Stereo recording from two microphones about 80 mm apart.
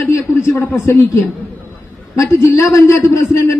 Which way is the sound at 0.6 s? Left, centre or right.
Left.